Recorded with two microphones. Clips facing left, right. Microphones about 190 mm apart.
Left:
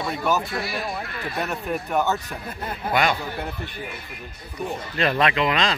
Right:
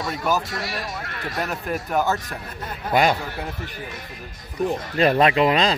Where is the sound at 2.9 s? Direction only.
40° right (ahead or behind).